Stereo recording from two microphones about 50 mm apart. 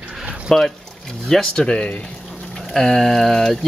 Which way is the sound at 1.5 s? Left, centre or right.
Centre.